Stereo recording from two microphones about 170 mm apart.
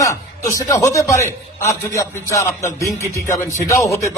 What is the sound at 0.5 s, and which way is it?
A man's voice, 20° left (ahead or behind).